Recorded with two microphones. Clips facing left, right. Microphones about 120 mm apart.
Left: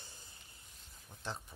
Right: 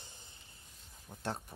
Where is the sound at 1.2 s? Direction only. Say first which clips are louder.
Right 5 dB; 60° right (ahead or behind).